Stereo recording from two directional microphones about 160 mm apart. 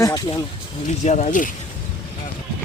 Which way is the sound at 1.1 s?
50° left (ahead or behind).